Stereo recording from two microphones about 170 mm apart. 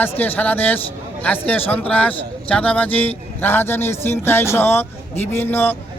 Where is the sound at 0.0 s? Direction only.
10° left (ahead or behind).